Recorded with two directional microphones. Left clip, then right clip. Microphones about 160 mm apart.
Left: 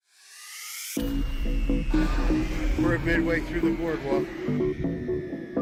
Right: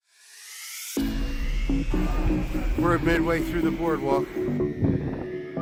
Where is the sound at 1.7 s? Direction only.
65° left (ahead or behind).